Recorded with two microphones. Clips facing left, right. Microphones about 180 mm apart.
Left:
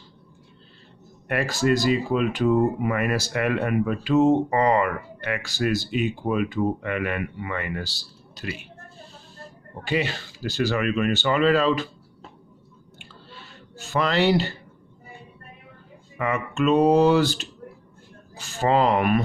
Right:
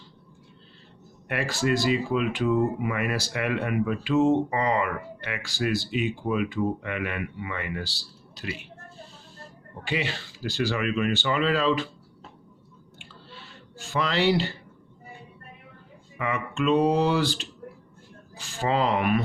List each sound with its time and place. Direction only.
1.3 s speech: 45° left (ahead or behind)
9.8 s speech: 40° left (ahead or behind)
13.3 s a sound: 45° left (ahead or behind)
16.1 s speech: 45° left (ahead or behind)